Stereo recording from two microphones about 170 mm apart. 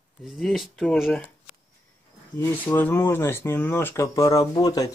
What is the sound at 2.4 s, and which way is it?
Speech, 10° left (ahead or behind).